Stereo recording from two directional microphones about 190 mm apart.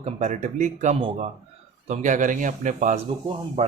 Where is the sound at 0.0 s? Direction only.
35° right (ahead or behind).